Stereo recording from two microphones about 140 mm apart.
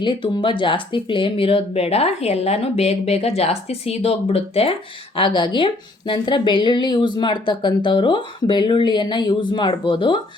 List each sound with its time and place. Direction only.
0.0 s speech: 35° left (ahead or behind)